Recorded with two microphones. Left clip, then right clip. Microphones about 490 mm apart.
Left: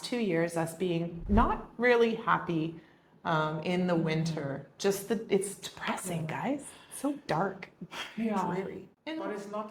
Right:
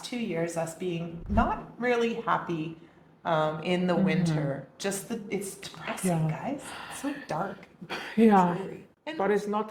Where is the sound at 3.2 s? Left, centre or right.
Centre.